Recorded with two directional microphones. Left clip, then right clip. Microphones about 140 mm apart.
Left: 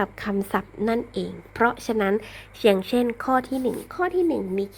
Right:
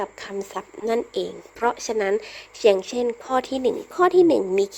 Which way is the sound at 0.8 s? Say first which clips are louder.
Right 2 dB; 25° right (ahead or behind).